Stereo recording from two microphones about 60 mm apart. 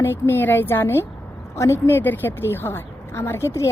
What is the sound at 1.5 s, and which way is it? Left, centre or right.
Speech, left.